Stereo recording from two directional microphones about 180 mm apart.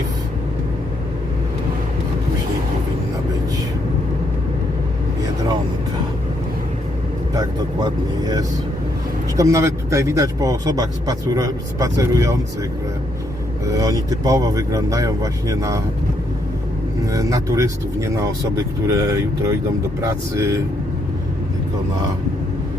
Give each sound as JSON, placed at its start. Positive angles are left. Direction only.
{"t": 7.3, "sound": "speech", "side_deg": -20}
{"t": 13.7, "sound": "speech", "side_deg": -20}
{"t": 17.0, "sound": "speech", "side_deg": -20}